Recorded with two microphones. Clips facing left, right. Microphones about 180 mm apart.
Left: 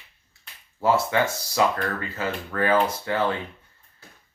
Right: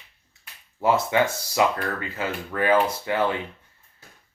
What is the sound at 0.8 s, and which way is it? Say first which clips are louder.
Speech: right 1 dB; 20° right (ahead or behind).